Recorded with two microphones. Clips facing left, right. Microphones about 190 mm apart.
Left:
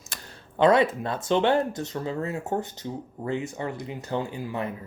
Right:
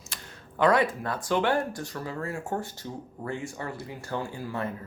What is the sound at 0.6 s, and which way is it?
Speech, 25° left (ahead or behind).